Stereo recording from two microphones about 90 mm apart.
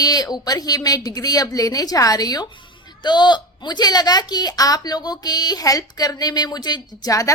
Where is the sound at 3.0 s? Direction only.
55° left (ahead or behind).